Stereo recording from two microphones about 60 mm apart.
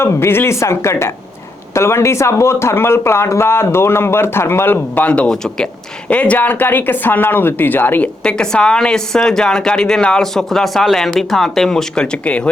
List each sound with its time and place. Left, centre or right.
0.0 s speech: left
5.0 s speech: left
5.3 s a woman's voice: centre
6.1 s speech: left
8.2 s a woman's voice: centre